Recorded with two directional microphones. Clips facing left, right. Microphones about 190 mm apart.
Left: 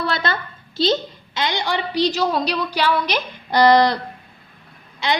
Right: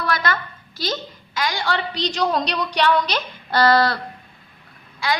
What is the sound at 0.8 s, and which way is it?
A woman's voice, 25° left (ahead or behind).